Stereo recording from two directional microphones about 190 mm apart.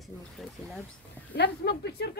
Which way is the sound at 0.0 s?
Centre (ahead or behind).